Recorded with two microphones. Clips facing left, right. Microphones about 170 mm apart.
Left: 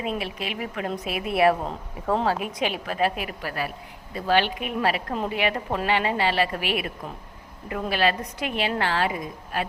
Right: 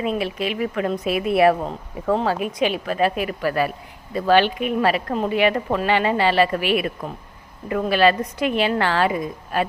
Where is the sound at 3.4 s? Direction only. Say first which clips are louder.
Right 10 dB; 65° right (ahead or behind).